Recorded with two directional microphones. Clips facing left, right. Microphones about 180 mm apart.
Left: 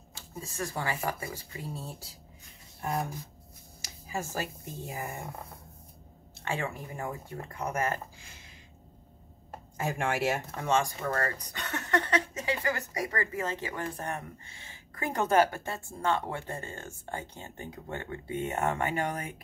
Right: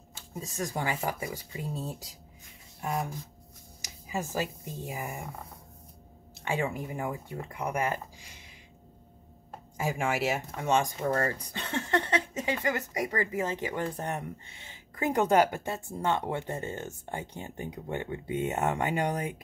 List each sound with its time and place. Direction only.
0.3 s speech: 15° right (ahead or behind)
2.8 s speech: 5° right (ahead or behind)
3.8 s speech: 15° right (ahead or behind)
6.4 s speech: 15° right (ahead or behind)
9.8 s speech: 5° right (ahead or behind)
10.6 s speech: 20° right (ahead or behind)